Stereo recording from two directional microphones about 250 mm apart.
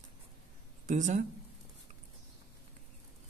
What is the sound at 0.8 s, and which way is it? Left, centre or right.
Speech, right.